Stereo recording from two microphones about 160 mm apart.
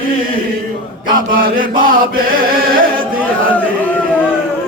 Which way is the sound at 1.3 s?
60° right (ahead or behind).